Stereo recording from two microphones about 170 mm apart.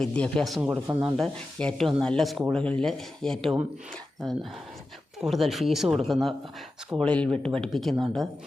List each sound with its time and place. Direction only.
0.0 s speech: 5° left (ahead or behind)
0.9 s speech: 15° right (ahead or behind)
1.1 s speech: 5° left (ahead or behind)
5.2 s speech: centre (ahead or behind)